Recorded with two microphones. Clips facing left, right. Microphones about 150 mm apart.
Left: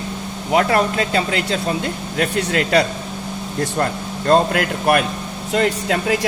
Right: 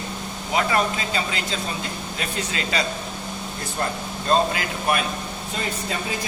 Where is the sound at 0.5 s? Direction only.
65° left (ahead or behind).